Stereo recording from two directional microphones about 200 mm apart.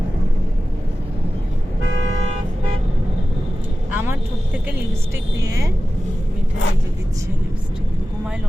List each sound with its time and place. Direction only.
3.9 s vehicle: 10° right (ahead or behind)
5.4 s speech: 15° right (ahead or behind)